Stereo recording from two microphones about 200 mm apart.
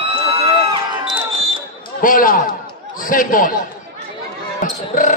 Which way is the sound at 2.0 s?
45° left (ahead or behind).